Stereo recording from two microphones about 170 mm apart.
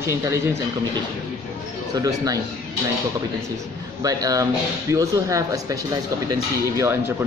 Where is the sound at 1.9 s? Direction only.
20° right (ahead or behind).